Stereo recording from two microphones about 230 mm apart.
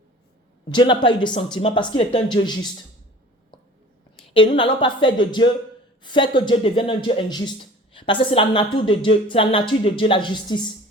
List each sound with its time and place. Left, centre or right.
0.7 s speech: left
4.4 s speech: left